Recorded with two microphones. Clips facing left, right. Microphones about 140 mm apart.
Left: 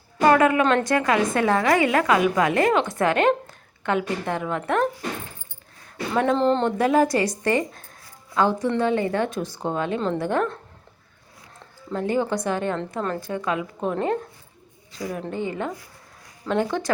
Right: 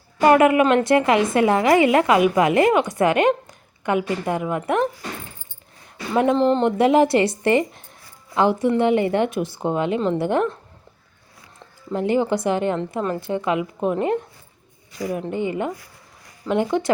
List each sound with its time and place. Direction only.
0.2 s a sound: 15° right (ahead or behind)
0.6 s a woman's voice: 10° right (ahead or behind)
0.9 s a woman's voice: 20° right (ahead or behind)
6.3 s speech: 5° right (ahead or behind)
6.7 s a woman's voice: 20° right (ahead or behind)
11.9 s a woman's voice: 15° right (ahead or behind)
13.1 s a woman's voice: 20° right (ahead or behind)